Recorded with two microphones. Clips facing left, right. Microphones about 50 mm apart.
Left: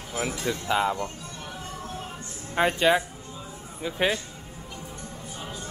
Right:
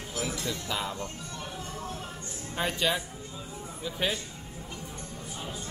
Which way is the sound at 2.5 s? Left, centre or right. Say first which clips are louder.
Left 8 dB; left.